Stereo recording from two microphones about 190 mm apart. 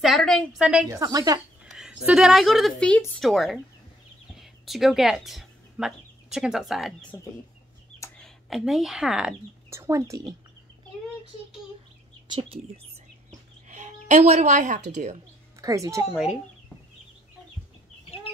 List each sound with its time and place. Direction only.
0.0 s speech: centre (ahead or behind)
0.9 s speech: 20° right (ahead or behind)
1.7 s a sound: 5° right (ahead or behind)
2.0 s speech: 5° right (ahead or behind)
8.2 s a woman's voice: centre (ahead or behind)
9.7 s speech: 15° right (ahead or behind)
12.3 s speech: 30° right (ahead or behind)
13.7 s a sound: 40° right (ahead or behind)
14.9 s speech: 35° right (ahead or behind)
15.6 s a woman's voice: 15° right (ahead or behind)